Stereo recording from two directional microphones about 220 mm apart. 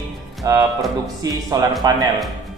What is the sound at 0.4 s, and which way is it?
Music, 15° right (ahead or behind).